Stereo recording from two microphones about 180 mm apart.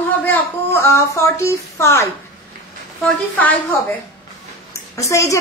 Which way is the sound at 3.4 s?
10° left (ahead or behind).